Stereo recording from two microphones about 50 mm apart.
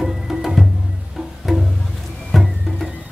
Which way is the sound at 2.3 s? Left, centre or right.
Centre.